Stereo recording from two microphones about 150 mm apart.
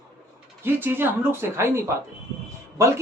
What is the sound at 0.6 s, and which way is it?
A man's voice, 15° right (ahead or behind).